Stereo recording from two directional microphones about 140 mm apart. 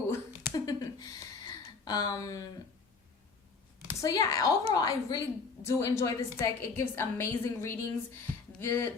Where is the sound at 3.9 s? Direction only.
25° left (ahead or behind).